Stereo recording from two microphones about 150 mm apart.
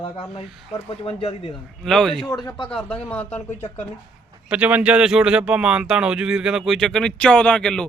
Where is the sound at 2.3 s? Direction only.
30° left (ahead or behind).